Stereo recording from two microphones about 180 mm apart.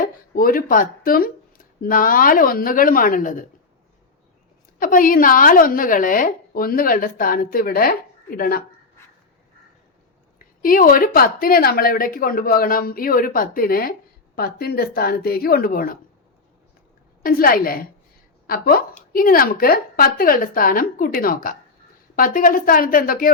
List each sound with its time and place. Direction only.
0.0 s speech: 50° left (ahead or behind)
4.8 s a woman's voice: 50° left (ahead or behind)
10.3 s a woman's voice: 50° left (ahead or behind)
17.2 s a woman's voice: 55° left (ahead or behind)